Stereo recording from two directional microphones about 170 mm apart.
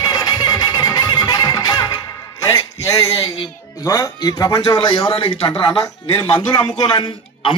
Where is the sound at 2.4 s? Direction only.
20° left (ahead or behind).